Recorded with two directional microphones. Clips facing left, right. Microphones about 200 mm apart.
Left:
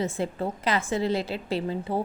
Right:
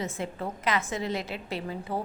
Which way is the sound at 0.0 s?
30° left (ahead or behind).